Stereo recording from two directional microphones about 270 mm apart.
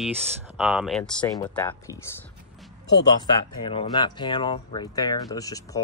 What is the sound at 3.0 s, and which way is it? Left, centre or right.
Speech, centre.